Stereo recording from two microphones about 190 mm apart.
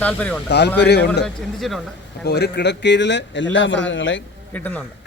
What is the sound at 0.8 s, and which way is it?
Speech, 60° left (ahead or behind).